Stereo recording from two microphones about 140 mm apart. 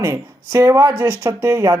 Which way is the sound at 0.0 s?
20° right (ahead or behind).